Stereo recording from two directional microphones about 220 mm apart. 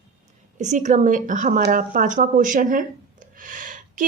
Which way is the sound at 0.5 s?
35° right (ahead or behind).